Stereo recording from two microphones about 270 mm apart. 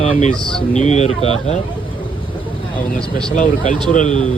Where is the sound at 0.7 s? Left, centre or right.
Left.